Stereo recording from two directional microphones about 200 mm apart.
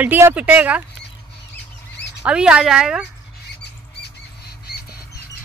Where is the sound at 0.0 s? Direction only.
10° right (ahead or behind).